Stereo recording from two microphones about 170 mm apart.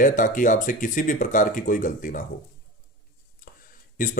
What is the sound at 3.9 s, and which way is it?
Speech, 50° left (ahead or behind).